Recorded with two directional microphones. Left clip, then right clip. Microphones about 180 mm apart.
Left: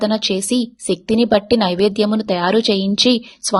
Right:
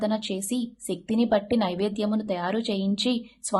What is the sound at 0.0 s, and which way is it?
A woman's voice, 40° left (ahead or behind).